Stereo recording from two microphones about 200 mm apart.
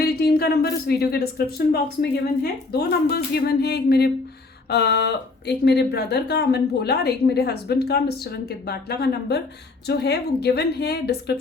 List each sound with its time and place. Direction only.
0.0 s a woman's voice: 50° left (ahead or behind)